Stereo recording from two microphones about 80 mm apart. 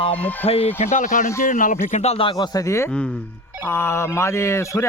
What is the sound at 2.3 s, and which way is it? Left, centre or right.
Speech, left.